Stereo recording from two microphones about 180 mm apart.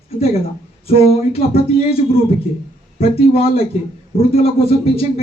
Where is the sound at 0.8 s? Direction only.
35° left (ahead or behind).